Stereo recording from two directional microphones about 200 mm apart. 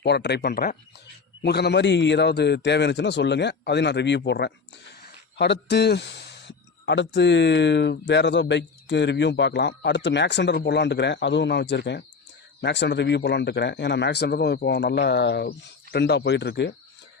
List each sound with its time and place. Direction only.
0.0 s speech: 55° left (ahead or behind)